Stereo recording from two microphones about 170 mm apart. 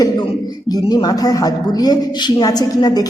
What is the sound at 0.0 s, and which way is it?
A man's voice, 25° left (ahead or behind).